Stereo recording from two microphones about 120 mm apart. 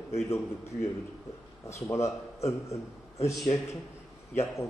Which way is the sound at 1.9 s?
25° left (ahead or behind).